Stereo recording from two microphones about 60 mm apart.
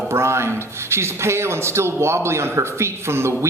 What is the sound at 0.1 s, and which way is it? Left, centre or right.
Speech, right.